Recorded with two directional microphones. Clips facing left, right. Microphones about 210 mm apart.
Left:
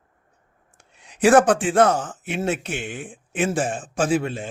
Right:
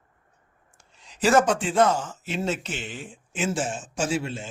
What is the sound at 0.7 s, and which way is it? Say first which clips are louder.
Speech: left 3 dB; 65° left (ahead or behind).